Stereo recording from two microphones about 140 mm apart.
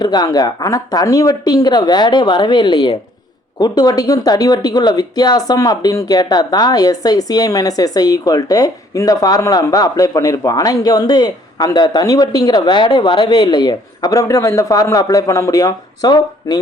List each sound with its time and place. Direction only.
0.0 s speech: 30° left (ahead or behind)